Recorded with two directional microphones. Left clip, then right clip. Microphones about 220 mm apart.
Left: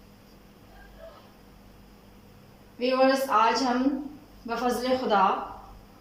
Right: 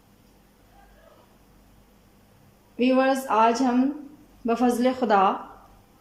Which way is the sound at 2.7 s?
50° right (ahead or behind).